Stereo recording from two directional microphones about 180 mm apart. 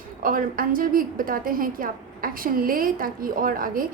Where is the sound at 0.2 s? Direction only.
50° right (ahead or behind).